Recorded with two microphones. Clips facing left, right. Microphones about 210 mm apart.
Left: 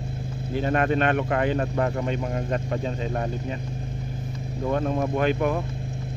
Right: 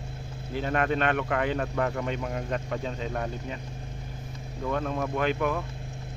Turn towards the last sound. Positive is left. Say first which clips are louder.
# left 4 dB
turn(degrees=35)  # may be behind; listen again after turning